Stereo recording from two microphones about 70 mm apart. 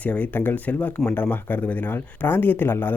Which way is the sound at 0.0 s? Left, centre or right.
Left.